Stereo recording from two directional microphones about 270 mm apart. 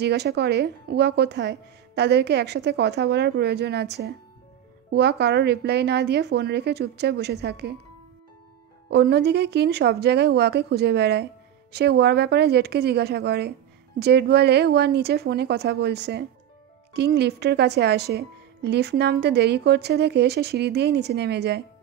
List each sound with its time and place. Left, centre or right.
0.0 s a woman's voice: right
8.9 s a woman's voice: right